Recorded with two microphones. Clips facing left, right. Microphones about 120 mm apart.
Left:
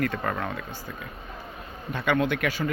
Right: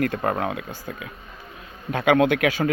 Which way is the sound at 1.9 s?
90° right.